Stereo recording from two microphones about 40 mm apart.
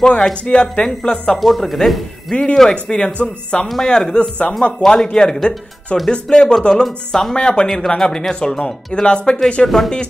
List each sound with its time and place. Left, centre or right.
0.0 s speech: left
1.6 s speech: centre
2.3 s speech: left
5.9 s speech: left
6.2 s speech: centre
7.3 s speech: left
7.6 s speech: centre